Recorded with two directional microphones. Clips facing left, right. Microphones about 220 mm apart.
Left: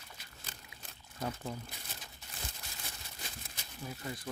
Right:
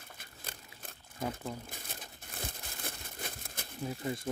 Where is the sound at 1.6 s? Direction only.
50° right (ahead or behind).